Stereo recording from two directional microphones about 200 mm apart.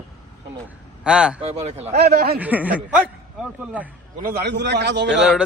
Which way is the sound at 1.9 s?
50° right (ahead or behind).